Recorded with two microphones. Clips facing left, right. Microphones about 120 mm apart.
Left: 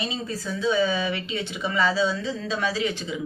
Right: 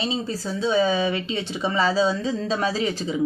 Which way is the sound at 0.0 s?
30° right (ahead or behind).